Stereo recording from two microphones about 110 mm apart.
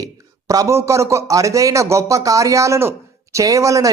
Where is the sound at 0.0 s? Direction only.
30° right (ahead or behind).